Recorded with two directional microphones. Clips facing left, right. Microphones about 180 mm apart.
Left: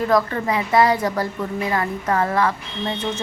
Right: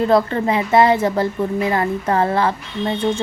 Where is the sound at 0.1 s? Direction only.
30° right (ahead or behind).